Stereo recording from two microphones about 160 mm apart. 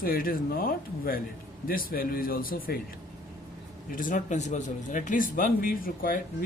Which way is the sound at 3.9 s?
55° left (ahead or behind).